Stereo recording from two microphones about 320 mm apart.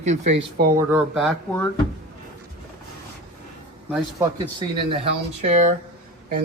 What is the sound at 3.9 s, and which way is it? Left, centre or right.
Speech, centre.